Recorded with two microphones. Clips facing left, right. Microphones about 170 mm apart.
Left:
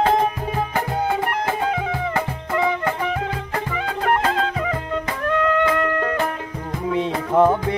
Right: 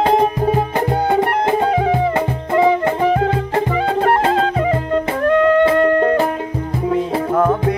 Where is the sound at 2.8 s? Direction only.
30° right (ahead or behind).